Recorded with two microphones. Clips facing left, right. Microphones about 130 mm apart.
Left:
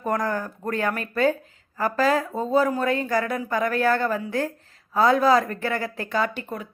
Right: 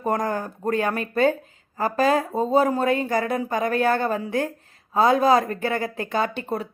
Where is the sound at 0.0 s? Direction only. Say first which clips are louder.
Right 1 dB; 25° right (ahead or behind).